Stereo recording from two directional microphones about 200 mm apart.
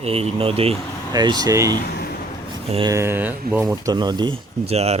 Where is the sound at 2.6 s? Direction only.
30° right (ahead or behind).